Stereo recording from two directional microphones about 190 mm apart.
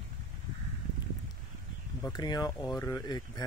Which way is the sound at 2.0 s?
20° left (ahead or behind).